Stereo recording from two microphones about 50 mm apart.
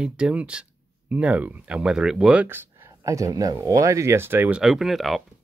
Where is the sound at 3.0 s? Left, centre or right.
Right.